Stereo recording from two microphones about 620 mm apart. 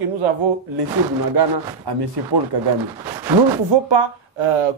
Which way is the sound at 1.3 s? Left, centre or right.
Right.